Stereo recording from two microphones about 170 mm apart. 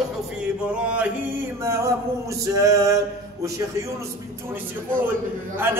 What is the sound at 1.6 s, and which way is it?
Male singing, 15° right (ahead or behind).